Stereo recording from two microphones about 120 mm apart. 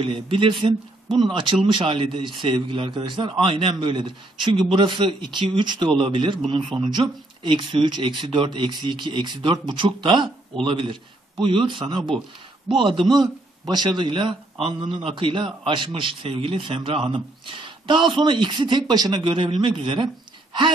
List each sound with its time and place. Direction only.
0.0 s a man's voice: 45° right (ahead or behind)